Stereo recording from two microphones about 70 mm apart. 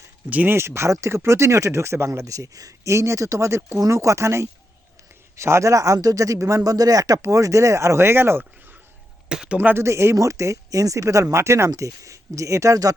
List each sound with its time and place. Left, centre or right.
0.3 s speech: right
0.5 s speech: right
9.3 s speech: centre
9.6 s speech: right
9.8 s speech: right